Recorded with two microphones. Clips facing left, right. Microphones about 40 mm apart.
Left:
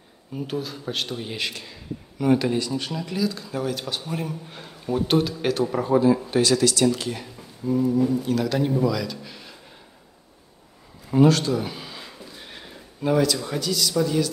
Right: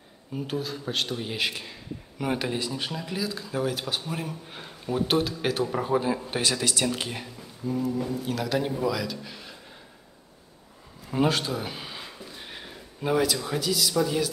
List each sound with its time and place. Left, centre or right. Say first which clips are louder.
0.3 s a man's voice: left 1 dB; centre
1.5 s a man's voice: left 1 dB; centre
6.2 s speech: left 7 dB; right
7.6 s a man's voice: left 7 dB; centre
11.1 s speech: left 7 dB; centre